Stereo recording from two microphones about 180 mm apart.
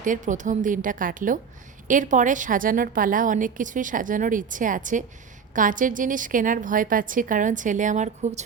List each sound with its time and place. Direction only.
0.0 s a woman's voice: 45° right (ahead or behind)